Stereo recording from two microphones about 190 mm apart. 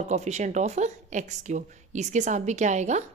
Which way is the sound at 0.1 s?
35° right (ahead or behind).